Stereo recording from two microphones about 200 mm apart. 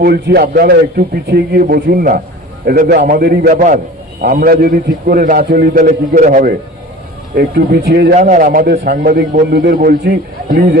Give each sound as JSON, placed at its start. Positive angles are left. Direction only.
{"t": 0.0, "sound": "a man's voice", "side_deg": -55}
{"t": 7.3, "sound": "a man's voice", "side_deg": -50}